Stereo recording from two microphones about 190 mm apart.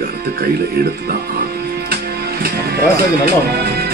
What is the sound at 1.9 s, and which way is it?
Music, 55° right (ahead or behind).